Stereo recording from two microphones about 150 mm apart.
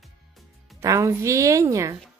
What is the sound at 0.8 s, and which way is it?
Speech, 20° right (ahead or behind).